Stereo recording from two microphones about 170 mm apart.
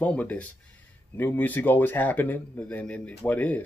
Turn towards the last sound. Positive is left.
turn(degrees=10)  # may be behind; listen again after turning